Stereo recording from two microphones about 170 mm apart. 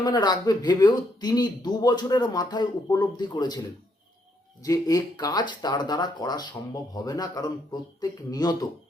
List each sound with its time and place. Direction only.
0.0 s speech: 25° left (ahead or behind)
4.6 s speech: 20° left (ahead or behind)